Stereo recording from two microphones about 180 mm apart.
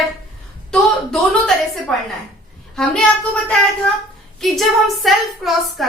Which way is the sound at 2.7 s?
5° left (ahead or behind).